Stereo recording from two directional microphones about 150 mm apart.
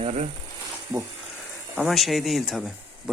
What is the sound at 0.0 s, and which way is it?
Frying, 45° right (ahead or behind).